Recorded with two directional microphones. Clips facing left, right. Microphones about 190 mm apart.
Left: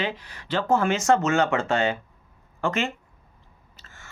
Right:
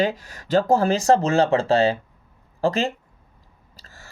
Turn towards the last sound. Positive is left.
turn(degrees=-35)  # may be behind; listen again after turning